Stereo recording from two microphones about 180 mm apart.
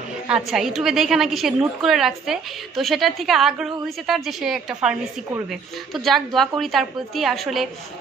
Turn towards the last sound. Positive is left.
turn(degrees=0)  # may be behind; listen again after turning